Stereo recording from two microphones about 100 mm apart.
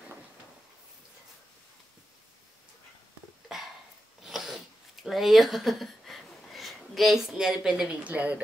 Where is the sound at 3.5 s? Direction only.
5° right (ahead or behind).